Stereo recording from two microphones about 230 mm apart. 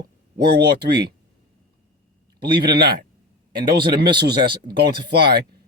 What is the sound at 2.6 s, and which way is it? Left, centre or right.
Speech, right.